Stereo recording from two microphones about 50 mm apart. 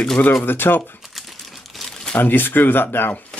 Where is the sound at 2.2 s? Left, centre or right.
Left.